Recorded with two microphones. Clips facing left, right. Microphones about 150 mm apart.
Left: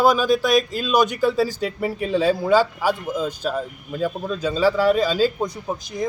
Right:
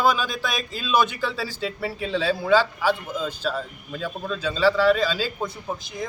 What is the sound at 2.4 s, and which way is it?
Speech, 10° left (ahead or behind).